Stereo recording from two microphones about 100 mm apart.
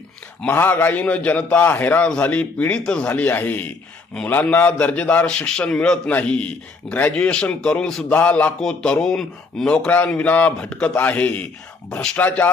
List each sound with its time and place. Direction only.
0.4 s a man's voice: 20° left (ahead or behind)